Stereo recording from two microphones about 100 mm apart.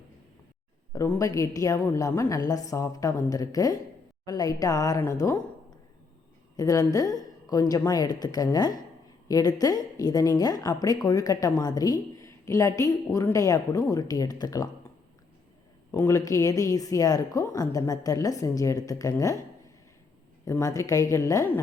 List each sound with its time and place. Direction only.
0.9 s a woman's voice: 30° left (ahead or behind)
6.6 s a woman's voice: 35° left (ahead or behind)
15.9 s a woman's voice: 30° left (ahead or behind)
20.4 s a woman's voice: 30° left (ahead or behind)